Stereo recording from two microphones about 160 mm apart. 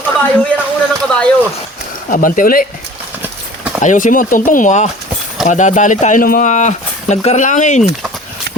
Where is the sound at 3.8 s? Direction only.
55° left (ahead or behind).